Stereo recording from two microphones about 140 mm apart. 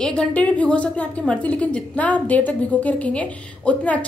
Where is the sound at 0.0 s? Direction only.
5° left (ahead or behind).